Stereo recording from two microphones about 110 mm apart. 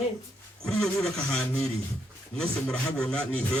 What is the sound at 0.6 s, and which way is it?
A man's voice, 5° left (ahead or behind).